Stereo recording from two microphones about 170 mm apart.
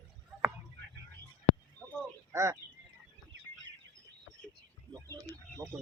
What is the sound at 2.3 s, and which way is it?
Bird, 15° right (ahead or behind).